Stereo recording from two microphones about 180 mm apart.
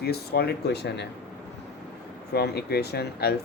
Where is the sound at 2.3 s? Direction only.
60° left (ahead or behind).